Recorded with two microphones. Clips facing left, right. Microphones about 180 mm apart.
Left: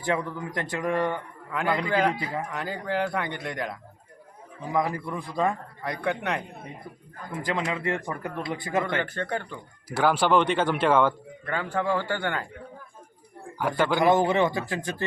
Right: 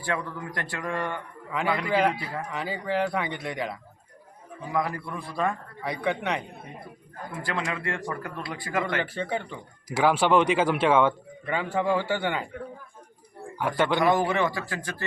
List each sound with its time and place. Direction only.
0.0 s speech: 20° left (ahead or behind)
1.5 s a man's voice: centre (ahead or behind)
2.1 s speech: 20° left (ahead or behind)
2.5 s a man's voice: centre (ahead or behind)
4.7 s speech: 20° left (ahead or behind)
5.8 s a man's voice: centre (ahead or behind)
7.7 s speech: 20° left (ahead or behind)
9.0 s a man's voice: 5° right (ahead or behind)
13.6 s a man's voice: centre (ahead or behind)
14.1 s speech: 25° left (ahead or behind)